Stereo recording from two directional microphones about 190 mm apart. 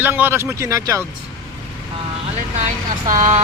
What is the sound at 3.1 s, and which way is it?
Speech, 40° right (ahead or behind).